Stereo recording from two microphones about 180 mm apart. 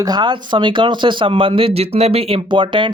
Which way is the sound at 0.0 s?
25° right (ahead or behind).